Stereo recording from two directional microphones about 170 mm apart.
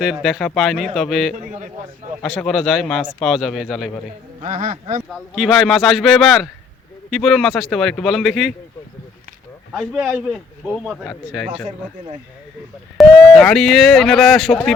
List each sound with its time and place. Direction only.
0.0 s speech: 5° right (ahead or behind)
1.4 s speech: 50° right (ahead or behind)
2.2 s speech: centre (ahead or behind)
4.4 s speech: 45° right (ahead or behind)
5.1 s speech: centre (ahead or behind)
9.7 s speech: 5° right (ahead or behind)
13.0 s speech: centre (ahead or behind)